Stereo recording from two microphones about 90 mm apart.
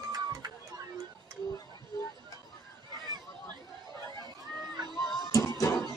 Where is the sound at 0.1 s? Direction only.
45° right (ahead or behind).